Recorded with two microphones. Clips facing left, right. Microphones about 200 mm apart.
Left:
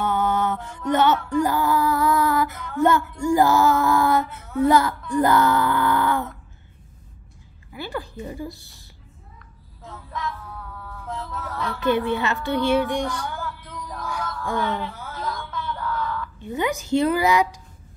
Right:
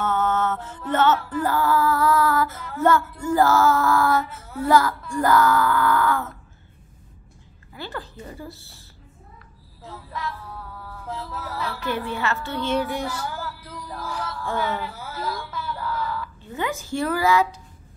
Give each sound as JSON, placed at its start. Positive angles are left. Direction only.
{"t": 0.0, "sound": "music", "side_deg": 15}
{"t": 0.7, "sound": "female singing", "side_deg": 15}
{"t": 1.1, "sound": "music", "side_deg": -5}
{"t": 1.4, "sound": "female singing", "side_deg": 15}
{"t": 4.6, "sound": "speech", "side_deg": 20}
{"t": 7.7, "sound": "female singing", "side_deg": 15}
{"t": 9.8, "sound": "a sound", "side_deg": 0}
{"t": 12.4, "sound": "female singing", "side_deg": 15}
{"t": 12.8, "sound": "music", "side_deg": -5}
{"t": 14.6, "sound": "a sound", "side_deg": -5}
{"t": 16.3, "sound": "female singing", "side_deg": 15}